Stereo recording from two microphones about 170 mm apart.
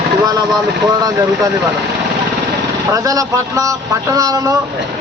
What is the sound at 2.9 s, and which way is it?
Speech, 20° right (ahead or behind).